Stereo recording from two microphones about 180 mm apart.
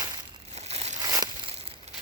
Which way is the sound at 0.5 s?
35° right (ahead or behind).